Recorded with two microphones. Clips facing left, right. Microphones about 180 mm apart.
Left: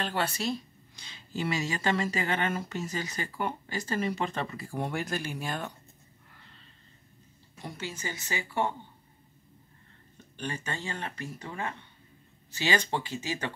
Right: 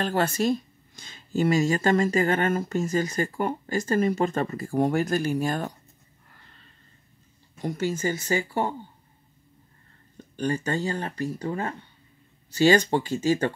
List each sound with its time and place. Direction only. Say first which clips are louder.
0.0 s speech: right 7 dB; 45° right (ahead or behind)
7.6 s speech: right 11 dB; 45° right (ahead or behind)
10.3 s speech: right 10 dB; 40° right (ahead or behind)